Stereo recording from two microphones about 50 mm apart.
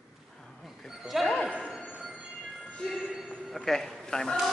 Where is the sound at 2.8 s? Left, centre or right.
Centre.